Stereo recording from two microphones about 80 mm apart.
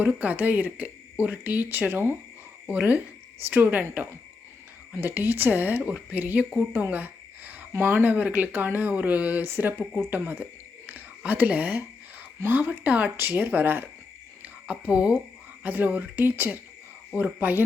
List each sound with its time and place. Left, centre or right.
0.0 s speech: centre
4.9 s speech: right
10.4 s whispering: centre
12.4 s speech: right
14.7 s speech: centre